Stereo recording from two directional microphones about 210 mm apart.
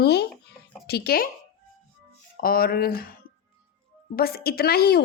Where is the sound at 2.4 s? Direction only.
45° left (ahead or behind).